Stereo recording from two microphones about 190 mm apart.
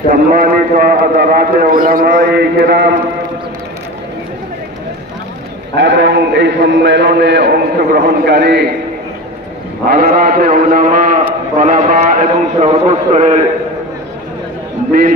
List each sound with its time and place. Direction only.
0.1 s a sound: 50° right (ahead or behind)
5.8 s a man's voice: 70° right (ahead or behind)
9.8 s a man's voice: 50° right (ahead or behind)
14.9 s a man's voice: 50° right (ahead or behind)